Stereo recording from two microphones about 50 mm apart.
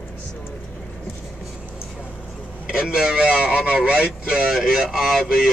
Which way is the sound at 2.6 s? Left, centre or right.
Centre.